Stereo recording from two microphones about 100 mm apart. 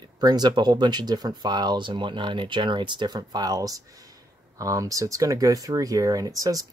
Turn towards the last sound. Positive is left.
turn(degrees=-35)  # may be behind; listen again after turning